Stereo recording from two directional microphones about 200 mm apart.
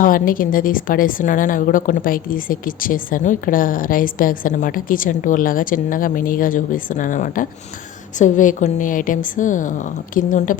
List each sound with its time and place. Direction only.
0.0 s a woman's voice: 45° left (ahead or behind)